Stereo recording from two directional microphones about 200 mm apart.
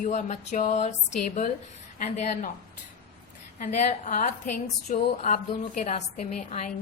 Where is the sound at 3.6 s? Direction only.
35° left (ahead or behind).